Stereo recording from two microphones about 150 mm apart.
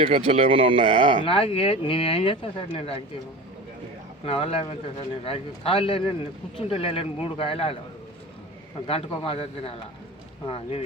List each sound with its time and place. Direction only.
0.0 s speech: 45° right (ahead or behind)
1.2 s speech: 35° left (ahead or behind)
4.3 s speech: 40° left (ahead or behind)
8.9 s speech: 40° left (ahead or behind)